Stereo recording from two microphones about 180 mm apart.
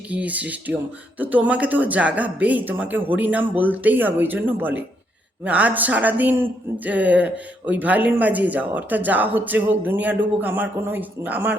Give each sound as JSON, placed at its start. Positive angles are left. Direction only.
{"t": 0.1, "sound": "speech", "side_deg": -10}